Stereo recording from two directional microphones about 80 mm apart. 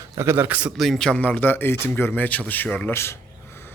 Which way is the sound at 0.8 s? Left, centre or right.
Centre.